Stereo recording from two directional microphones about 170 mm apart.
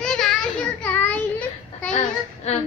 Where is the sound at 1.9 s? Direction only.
40° left (ahead or behind).